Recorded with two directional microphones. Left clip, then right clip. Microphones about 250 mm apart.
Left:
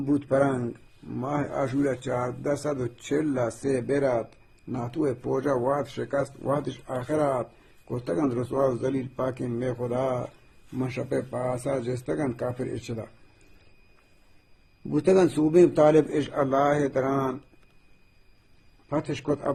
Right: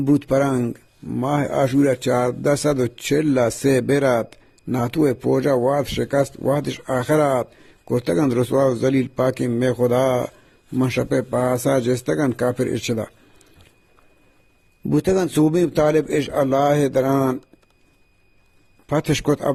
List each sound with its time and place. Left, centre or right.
0.1 s speech: right
14.9 s speech: right
18.9 s speech: right